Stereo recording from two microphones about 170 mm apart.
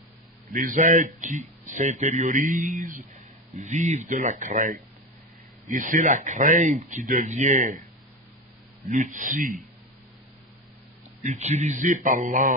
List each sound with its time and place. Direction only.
0.5 s speech: 50° right (ahead or behind)
8.8 s speech: 50° right (ahead or behind)
11.2 s speech: 40° right (ahead or behind)